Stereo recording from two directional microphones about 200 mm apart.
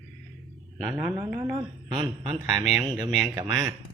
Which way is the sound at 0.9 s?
10° right (ahead or behind).